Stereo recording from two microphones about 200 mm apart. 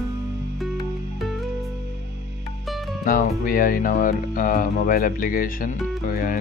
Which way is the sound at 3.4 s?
45° left (ahead or behind).